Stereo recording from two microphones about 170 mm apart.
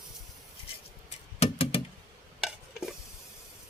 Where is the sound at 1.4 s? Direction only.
35° left (ahead or behind).